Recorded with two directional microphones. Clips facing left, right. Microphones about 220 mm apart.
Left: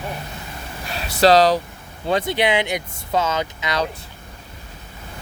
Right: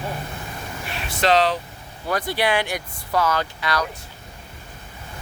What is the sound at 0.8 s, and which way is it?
Speech, 40° left (ahead or behind).